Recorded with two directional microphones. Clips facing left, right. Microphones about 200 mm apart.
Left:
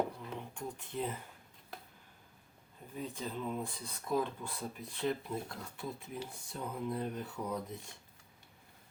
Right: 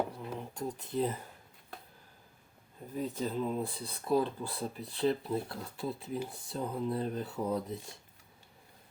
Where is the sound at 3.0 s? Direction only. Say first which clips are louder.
Right 6 dB; 40° right (ahead or behind).